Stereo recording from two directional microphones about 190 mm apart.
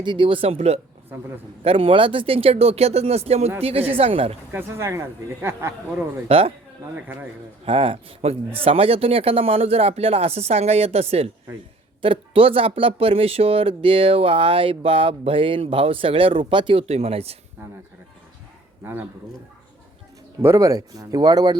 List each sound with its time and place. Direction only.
0.0 s speech: 25° right (ahead or behind)
4.5 s speech: 15° right (ahead or behind)
6.2 s speech: 30° right (ahead or behind)
6.9 s speech: 10° right (ahead or behind)
7.6 s speech: 30° right (ahead or behind)
18.8 s speech: 10° right (ahead or behind)
20.4 s speech: 15° right (ahead or behind)